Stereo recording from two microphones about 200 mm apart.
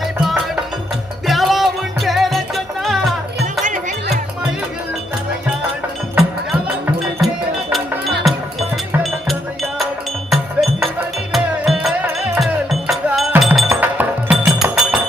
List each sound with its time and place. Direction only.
1.3 s music: centre (ahead or behind)
3.6 s music: 40° right (ahead or behind)
6.1 s music: centre (ahead or behind)
9.2 s music: centre (ahead or behind)